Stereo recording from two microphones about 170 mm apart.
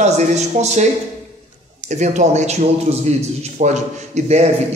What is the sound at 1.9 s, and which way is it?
Speech, 45° right (ahead or behind).